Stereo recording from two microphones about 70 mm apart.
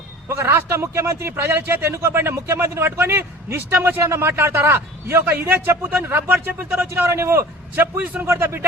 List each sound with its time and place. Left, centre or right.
0.3 s speech: right